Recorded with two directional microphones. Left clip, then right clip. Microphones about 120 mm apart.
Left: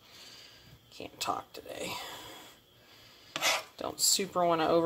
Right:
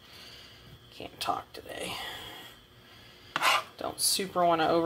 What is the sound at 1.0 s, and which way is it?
Speech, 35° left (ahead or behind).